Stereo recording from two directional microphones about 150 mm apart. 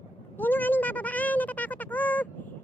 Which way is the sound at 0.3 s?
10° left (ahead or behind).